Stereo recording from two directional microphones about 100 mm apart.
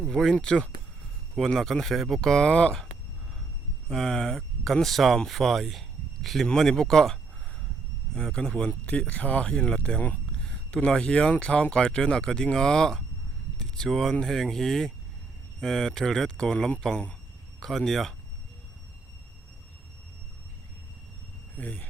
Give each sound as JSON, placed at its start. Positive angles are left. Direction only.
{"t": 0.0, "sound": "speech", "side_deg": 5}
{"t": 3.8, "sound": "speech", "side_deg": 5}
{"t": 21.5, "sound": "speech", "side_deg": 15}